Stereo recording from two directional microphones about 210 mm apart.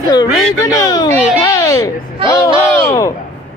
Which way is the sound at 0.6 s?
15° left (ahead or behind).